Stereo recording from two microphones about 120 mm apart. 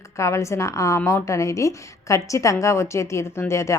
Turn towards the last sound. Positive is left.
turn(degrees=25)  # may be behind; listen again after turning